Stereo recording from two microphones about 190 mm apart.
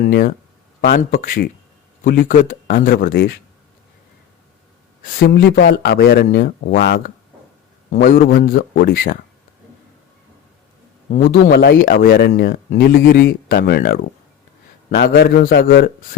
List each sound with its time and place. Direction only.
0.1 s speech: 50° left (ahead or behind)
5.0 s speech: 50° left (ahead or behind)
7.9 s speech: 50° left (ahead or behind)
11.1 s speech: 50° left (ahead or behind)